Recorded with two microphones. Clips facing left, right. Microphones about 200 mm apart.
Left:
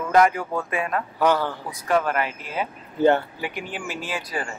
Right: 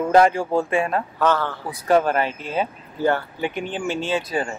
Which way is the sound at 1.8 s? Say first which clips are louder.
Right 4 dB; 30° right (ahead or behind).